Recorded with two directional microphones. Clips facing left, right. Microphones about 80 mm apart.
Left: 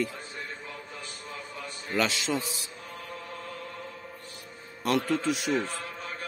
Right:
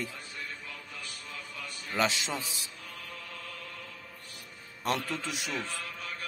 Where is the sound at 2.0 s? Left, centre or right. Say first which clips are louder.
Left 2 dB; right.